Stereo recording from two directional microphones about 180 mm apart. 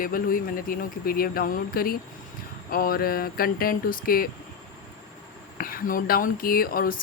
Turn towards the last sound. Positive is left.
turn(degrees=55)  # may be behind; listen again after turning